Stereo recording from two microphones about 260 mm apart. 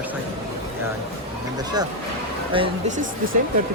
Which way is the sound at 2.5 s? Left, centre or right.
Centre.